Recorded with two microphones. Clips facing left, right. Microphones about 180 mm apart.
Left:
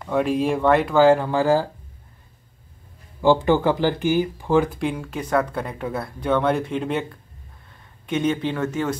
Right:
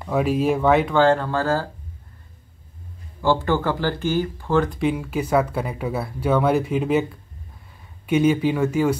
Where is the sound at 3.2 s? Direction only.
15° left (ahead or behind).